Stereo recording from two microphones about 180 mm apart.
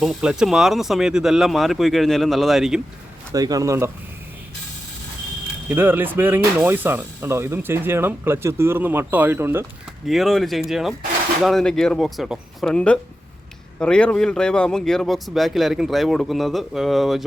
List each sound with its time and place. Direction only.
0.0 s speech: 5° right (ahead or behind)
3.3 s speech: 20° right (ahead or behind)
5.6 s speech: 10° right (ahead or behind)
10.1 s speech: centre (ahead or behind)